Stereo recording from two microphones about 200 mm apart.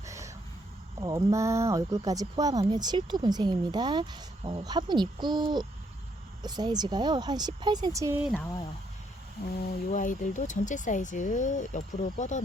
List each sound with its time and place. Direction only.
0.0 s a sound: 15° right (ahead or behind)
1.0 s speech: 15° right (ahead or behind)
8.2 s speech: 5° right (ahead or behind)
9.9 s speech: 40° left (ahead or behind)